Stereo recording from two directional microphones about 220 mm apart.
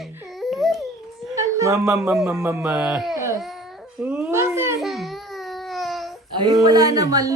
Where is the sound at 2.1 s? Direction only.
10° right (ahead or behind).